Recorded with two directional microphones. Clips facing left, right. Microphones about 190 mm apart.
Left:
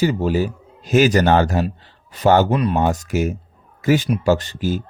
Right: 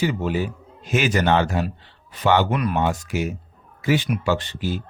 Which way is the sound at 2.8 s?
40° left (ahead or behind).